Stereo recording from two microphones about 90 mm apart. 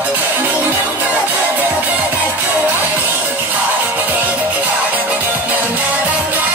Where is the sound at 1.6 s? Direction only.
15° right (ahead or behind).